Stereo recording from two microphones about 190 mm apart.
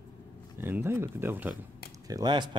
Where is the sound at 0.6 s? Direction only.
10° right (ahead or behind).